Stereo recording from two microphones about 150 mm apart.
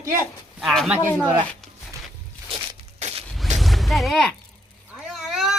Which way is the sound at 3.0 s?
50° right (ahead or behind).